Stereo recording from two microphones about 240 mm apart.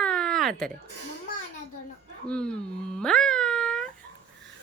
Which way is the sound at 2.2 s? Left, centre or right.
Centre.